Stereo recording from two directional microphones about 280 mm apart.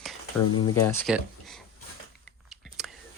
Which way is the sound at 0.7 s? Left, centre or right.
Centre.